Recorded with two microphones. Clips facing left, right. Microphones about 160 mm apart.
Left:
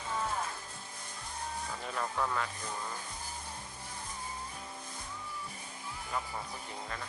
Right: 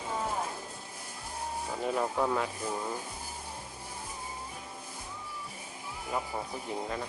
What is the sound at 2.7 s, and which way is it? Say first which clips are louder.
Sizzle: right 5 dB; 20° right (ahead or behind).